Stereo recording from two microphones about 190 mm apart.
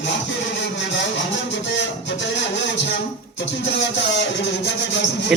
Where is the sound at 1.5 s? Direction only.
70° left (ahead or behind).